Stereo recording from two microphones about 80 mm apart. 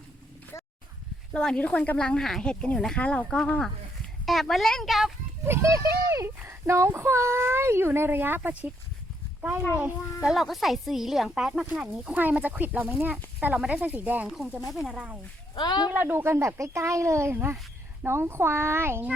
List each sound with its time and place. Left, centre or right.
0.5 s a sound: left
1.3 s speech: centre
5.5 s speech: right
9.7 s speech: right
10.2 s speech: centre
11.6 s speech: centre
14.3 s speech: centre
15.5 s speech: left
15.9 s speech: right